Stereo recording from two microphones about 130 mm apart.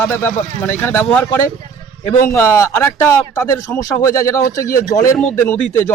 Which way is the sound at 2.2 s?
20° left (ahead or behind).